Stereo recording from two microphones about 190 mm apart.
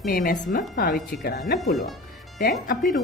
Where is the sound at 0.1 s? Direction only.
45° left (ahead or behind).